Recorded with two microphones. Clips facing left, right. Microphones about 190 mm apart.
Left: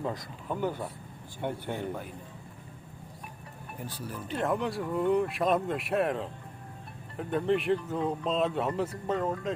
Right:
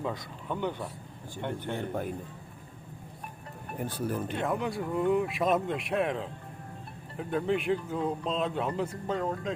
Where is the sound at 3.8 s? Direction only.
55° right (ahead or behind).